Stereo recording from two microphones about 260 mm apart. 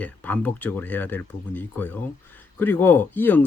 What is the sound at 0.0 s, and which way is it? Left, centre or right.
Speech, centre.